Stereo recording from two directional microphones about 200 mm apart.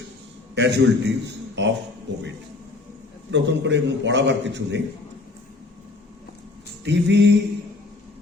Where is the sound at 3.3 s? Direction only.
65° right (ahead or behind).